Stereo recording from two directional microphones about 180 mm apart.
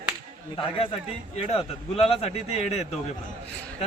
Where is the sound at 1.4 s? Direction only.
35° left (ahead or behind).